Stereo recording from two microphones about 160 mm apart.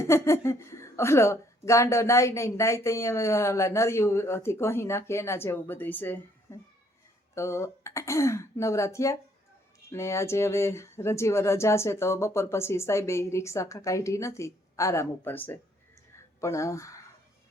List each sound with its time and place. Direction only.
0.0 s speech: 20° left (ahead or behind)